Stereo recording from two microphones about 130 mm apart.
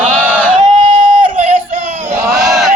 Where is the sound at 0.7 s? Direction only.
40° right (ahead or behind).